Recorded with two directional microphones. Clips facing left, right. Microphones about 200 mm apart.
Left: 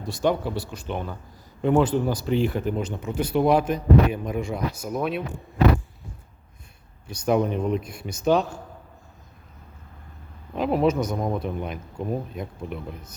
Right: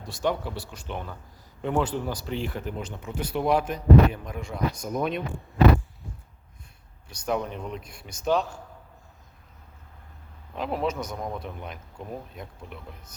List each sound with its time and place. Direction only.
0.1 s speech: 20° left (ahead or behind); by 5.2 s 5° left (ahead or behind)
7.1 s speech: 15° left (ahead or behind)
10.5 s speech: 10° left (ahead or behind)
11.1 s speech: 25° left (ahead or behind)
11.4 s speech: 10° left (ahead or behind)